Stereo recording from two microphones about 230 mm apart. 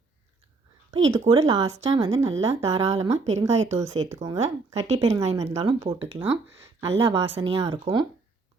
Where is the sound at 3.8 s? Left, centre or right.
Centre.